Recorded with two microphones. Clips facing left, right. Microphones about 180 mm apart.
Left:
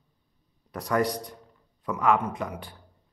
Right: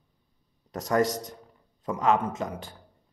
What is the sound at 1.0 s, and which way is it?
Speech, 45° right (ahead or behind).